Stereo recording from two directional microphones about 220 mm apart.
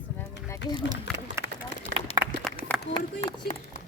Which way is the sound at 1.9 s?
40° right (ahead or behind).